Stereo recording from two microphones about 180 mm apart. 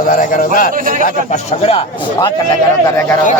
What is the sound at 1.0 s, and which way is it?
Speech, 35° left (ahead or behind).